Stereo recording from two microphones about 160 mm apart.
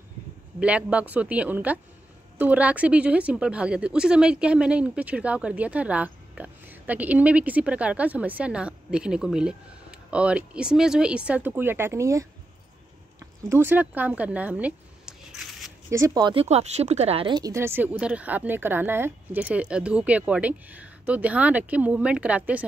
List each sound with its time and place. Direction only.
0.6 s a woman's voice: 5° right (ahead or behind)
13.5 s speech: 15° right (ahead or behind)
15.9 s speech: 20° right (ahead or behind)
16.4 s speech: 45° right (ahead or behind)
17.4 s a woman's voice: 20° right (ahead or behind)